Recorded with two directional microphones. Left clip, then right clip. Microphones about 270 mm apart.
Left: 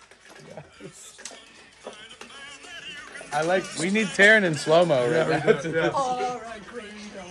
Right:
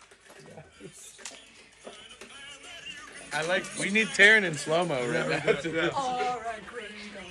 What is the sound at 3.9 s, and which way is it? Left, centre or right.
A man's voice, left.